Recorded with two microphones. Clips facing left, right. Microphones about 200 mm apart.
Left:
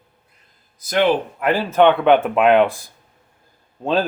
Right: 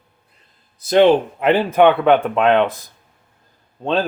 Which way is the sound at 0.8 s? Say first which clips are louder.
Right 5 dB; 30° right (ahead or behind).